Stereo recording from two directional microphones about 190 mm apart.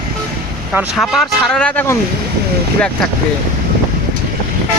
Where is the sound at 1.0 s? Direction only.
5° left (ahead or behind).